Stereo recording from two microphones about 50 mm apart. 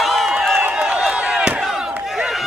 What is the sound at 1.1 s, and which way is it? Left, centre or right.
Chop, centre.